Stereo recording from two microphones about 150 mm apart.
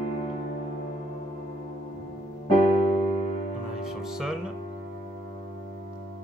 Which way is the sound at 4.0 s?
5° right (ahead or behind).